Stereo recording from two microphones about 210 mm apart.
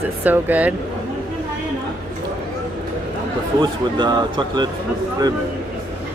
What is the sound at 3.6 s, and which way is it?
A man's voice, 20° right (ahead or behind).